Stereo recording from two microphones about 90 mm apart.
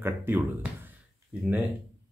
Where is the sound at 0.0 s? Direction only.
25° right (ahead or behind).